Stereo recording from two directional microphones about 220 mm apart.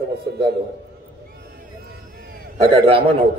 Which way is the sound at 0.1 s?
45° right (ahead or behind).